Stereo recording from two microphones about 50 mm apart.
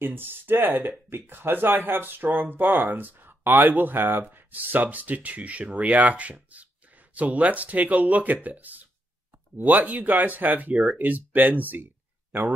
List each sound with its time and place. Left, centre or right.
0.0 s speech: right